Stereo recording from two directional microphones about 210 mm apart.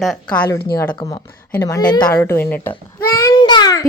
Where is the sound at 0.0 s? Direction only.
5° left (ahead or behind).